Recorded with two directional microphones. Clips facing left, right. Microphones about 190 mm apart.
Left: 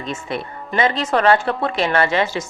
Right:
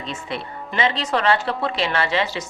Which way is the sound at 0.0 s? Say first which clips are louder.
Left 3 dB; 45° left (ahead or behind).